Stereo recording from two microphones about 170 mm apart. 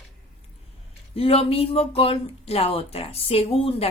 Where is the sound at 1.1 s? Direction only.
35° left (ahead or behind).